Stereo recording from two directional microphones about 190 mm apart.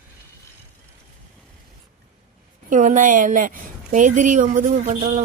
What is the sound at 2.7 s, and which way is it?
Speech, 40° right (ahead or behind).